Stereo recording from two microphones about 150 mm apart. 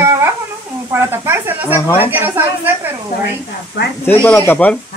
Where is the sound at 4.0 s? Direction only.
10° left (ahead or behind).